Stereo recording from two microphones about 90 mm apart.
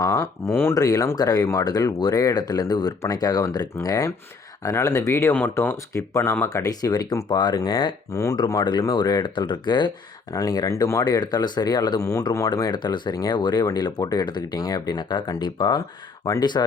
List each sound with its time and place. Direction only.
0.0 s a sound: 30° left (ahead or behind)
0.7 s speech: 40° left (ahead or behind)
5.3 s speech: 20° left (ahead or behind)
6.5 s speech: 40° left (ahead or behind)
7.3 s speech: 60° left (ahead or behind)
8.1 s speech: 40° left (ahead or behind)
8.8 s speech: 50° left (ahead or behind)
10.3 s speech: 45° left (ahead or behind)
11.0 s speech: 50° left (ahead or behind)
12.5 s speech: 50° left (ahead or behind)
16.2 s speech: 40° left (ahead or behind)